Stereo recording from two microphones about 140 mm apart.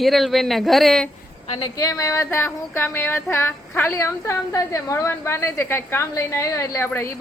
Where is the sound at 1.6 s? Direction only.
25° left (ahead or behind).